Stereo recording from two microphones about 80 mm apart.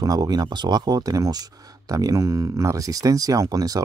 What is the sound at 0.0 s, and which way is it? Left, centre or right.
Speech, right.